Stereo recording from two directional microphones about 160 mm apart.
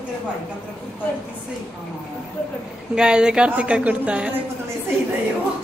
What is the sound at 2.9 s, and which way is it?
A woman's voice, 5° right (ahead or behind).